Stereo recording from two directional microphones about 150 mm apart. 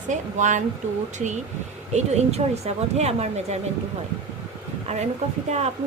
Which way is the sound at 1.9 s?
50° right (ahead or behind).